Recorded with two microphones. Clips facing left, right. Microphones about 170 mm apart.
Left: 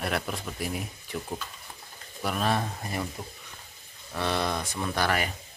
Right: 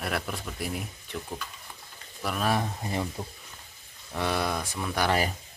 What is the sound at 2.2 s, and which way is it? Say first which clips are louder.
Speech: left 1 dB; centre (ahead or behind).